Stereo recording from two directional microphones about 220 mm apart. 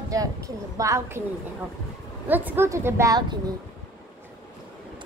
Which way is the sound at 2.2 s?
10° right (ahead or behind).